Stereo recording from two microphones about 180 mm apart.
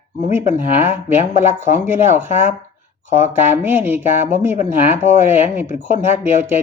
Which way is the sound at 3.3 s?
10° right (ahead or behind).